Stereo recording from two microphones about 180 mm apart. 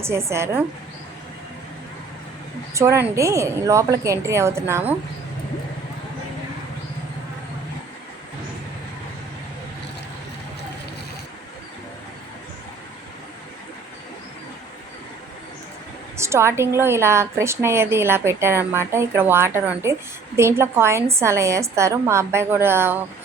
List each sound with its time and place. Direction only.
0.0 s a woman's voice: 15° right (ahead or behind)
2.7 s a woman's voice: 15° right (ahead or behind)
16.1 s a woman's voice: 15° right (ahead or behind)